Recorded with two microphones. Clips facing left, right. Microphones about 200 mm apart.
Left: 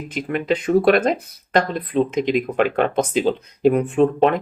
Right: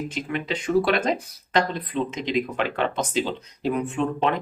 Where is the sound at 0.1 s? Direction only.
50° left (ahead or behind).